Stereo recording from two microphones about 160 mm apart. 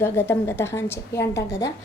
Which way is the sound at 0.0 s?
15° left (ahead or behind).